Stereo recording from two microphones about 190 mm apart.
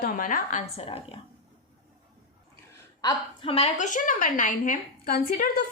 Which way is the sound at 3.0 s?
25° left (ahead or behind).